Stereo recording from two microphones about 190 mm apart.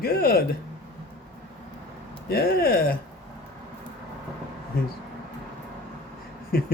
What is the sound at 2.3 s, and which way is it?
Speech, 55° left (ahead or behind).